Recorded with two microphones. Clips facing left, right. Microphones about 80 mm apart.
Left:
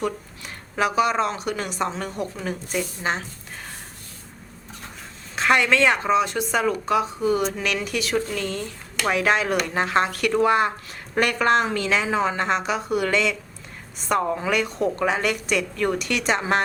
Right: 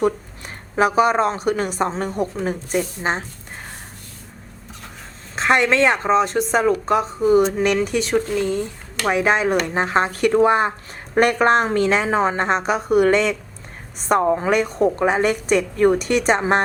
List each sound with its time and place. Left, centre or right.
0.0 s a woman's voice: right
5.4 s a woman's voice: right
8.1 s a woman's voice: centre
11.2 s a woman's voice: right
14.2 s a woman's voice: right
14.5 s a woman's voice: right
16.0 s a woman's voice: right